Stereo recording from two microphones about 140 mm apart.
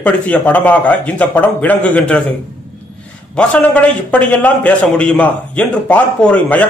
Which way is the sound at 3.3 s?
10° left (ahead or behind).